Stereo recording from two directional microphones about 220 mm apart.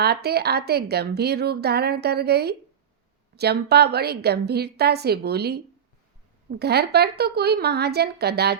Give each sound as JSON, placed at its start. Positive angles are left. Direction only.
{"t": 0.0, "sound": "a woman's voice", "side_deg": -45}
{"t": 6.6, "sound": "a woman's voice", "side_deg": -45}